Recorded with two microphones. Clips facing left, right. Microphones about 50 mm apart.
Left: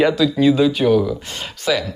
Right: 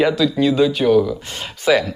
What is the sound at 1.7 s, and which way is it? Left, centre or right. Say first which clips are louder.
Speech: right 4 dB; right.